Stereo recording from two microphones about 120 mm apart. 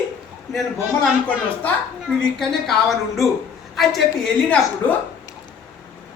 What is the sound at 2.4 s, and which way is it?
A woman's voice, centre (ahead or behind).